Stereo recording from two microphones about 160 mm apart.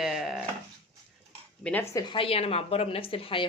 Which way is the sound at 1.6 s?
5° left (ahead or behind).